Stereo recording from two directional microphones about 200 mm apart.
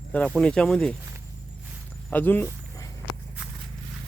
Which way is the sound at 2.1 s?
10° left (ahead or behind).